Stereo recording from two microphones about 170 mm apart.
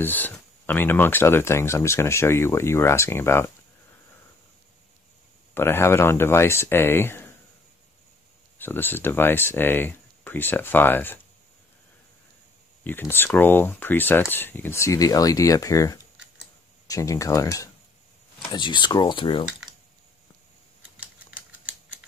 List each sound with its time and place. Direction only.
0.0 s speech: 10° left (ahead or behind)
5.5 s speech: 15° left (ahead or behind)
8.5 s speech: 10° left (ahead or behind)
12.8 s speech: 10° left (ahead or behind); by 19.4 s 30° left (ahead or behind)